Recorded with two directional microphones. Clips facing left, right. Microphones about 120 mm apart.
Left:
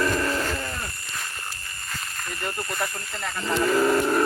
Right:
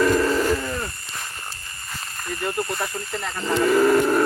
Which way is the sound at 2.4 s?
20° right (ahead or behind).